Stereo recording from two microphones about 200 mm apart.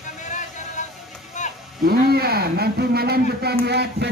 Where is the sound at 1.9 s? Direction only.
50° right (ahead or behind).